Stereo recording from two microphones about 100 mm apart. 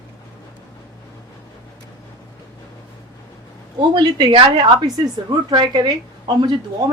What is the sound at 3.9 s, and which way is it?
A woman's voice, 50° right (ahead or behind).